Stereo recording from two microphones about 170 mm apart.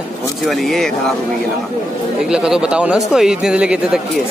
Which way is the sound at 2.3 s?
5° right (ahead or behind).